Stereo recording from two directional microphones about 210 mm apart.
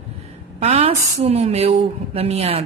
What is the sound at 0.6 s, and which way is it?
A woman's voice, 30° right (ahead or behind).